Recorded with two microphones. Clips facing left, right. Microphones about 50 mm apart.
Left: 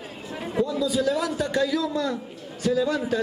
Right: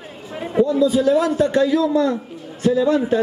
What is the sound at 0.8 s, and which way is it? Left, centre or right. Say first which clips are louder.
A man's voice: right 8 dB; right.